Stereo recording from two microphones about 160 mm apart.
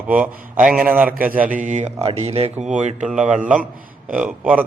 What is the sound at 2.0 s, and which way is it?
A man's voice, 40° right (ahead or behind).